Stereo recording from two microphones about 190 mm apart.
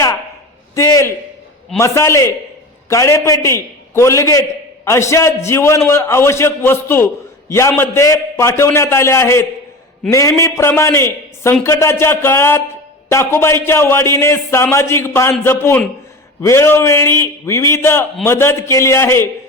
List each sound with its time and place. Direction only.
0.8 s a man's voice: 15° left (ahead or behind)